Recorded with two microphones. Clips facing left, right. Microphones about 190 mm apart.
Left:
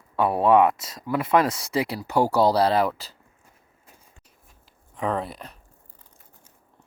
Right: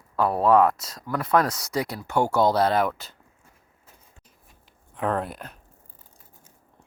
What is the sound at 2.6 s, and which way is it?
Speech, centre (ahead or behind).